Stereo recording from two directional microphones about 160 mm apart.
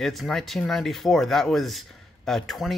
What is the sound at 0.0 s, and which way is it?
A man's voice, centre (ahead or behind).